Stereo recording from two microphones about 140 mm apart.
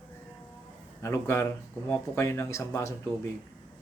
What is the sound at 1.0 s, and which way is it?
Speech, 20° left (ahead or behind).